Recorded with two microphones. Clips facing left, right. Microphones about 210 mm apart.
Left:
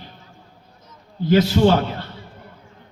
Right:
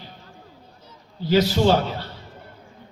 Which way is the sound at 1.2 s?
55° left (ahead or behind).